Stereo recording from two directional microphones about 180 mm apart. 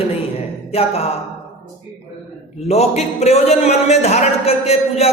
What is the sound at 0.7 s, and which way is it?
Speech, 30° left (ahead or behind).